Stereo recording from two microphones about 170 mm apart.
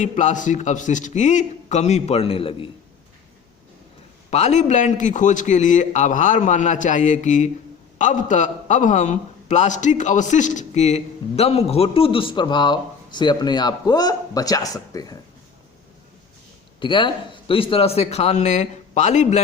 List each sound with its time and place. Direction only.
0.0 s a man's voice: 45° left (ahead or behind)
4.3 s a man's voice: 40° left (ahead or behind); by 15.2 s 20° left (ahead or behind)
16.8 s a man's voice: 30° left (ahead or behind)